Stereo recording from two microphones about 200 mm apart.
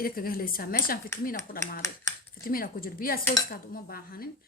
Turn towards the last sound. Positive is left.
turn(degrees=50)  # may be behind; listen again after turning